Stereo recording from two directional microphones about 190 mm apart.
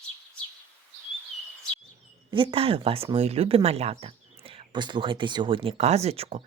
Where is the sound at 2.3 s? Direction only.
25° right (ahead or behind).